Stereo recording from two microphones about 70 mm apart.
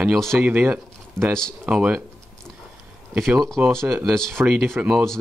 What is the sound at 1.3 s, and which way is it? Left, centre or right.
Speech, centre.